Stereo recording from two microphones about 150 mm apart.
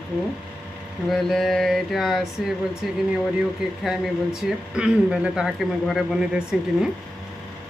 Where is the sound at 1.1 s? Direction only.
Centre (ahead or behind).